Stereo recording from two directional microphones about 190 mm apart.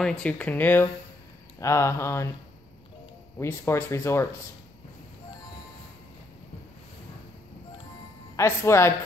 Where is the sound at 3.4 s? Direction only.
15° left (ahead or behind).